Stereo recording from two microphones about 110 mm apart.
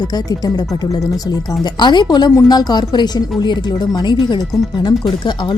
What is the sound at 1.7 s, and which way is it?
A woman's voice, 45° left (ahead or behind).